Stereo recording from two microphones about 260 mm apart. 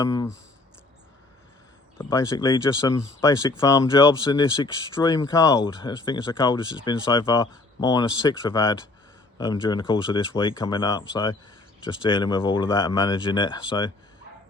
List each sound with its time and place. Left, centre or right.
0.0 s speech: centre
2.0 s speech: centre